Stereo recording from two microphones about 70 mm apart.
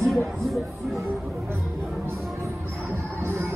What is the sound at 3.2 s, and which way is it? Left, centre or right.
Music, right.